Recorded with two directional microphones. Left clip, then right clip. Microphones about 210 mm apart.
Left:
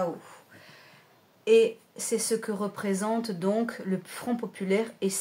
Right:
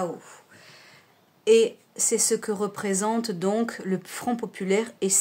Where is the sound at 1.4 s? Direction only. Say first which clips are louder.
Right 2 dB; 50° right (ahead or behind).